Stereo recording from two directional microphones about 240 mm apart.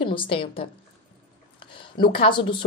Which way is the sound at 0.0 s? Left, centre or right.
Left.